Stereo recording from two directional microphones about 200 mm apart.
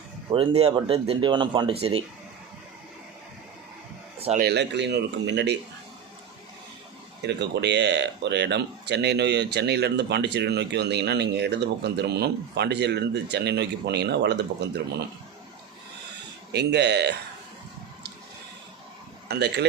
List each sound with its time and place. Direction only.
0.3 s speech: 30° right (ahead or behind)
4.4 s speech: 55° right (ahead or behind)
7.2 s speech: 60° right (ahead or behind)
16.5 s speech: 55° right (ahead or behind)
19.3 s speech: 55° right (ahead or behind)